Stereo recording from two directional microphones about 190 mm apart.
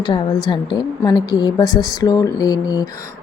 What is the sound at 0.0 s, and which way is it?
A woman's voice, 25° left (ahead or behind).